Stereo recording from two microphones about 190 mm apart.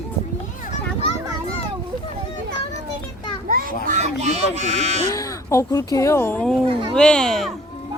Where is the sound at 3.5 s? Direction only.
50° right (ahead or behind).